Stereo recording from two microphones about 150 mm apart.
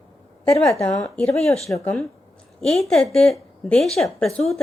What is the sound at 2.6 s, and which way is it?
A woman's voice, 5° left (ahead or behind).